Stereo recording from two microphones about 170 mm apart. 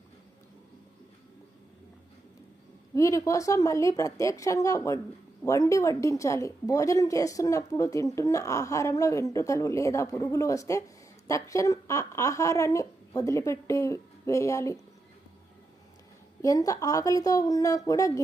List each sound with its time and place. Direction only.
2.9 s speech: 20° left (ahead or behind)
16.4 s speech: 20° left (ahead or behind)